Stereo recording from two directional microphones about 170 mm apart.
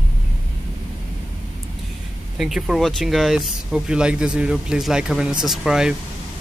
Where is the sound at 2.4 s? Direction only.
Centre (ahead or behind).